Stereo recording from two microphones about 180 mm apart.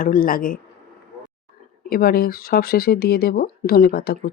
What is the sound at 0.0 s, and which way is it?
Speech, 50° left (ahead or behind).